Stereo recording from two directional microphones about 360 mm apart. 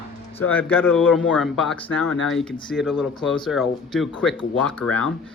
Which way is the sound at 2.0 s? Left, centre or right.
Left.